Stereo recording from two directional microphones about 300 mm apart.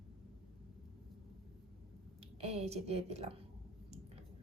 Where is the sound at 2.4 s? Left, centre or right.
Centre.